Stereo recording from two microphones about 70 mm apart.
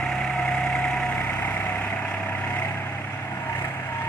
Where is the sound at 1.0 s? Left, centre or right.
Left.